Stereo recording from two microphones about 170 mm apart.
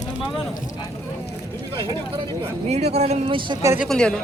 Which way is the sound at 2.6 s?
40° right (ahead or behind).